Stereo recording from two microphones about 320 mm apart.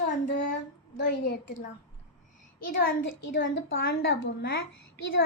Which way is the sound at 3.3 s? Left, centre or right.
Left.